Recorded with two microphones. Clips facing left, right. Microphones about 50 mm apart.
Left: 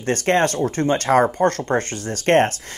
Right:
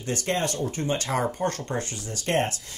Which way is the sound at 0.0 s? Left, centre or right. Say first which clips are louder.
Left 9 dB; left.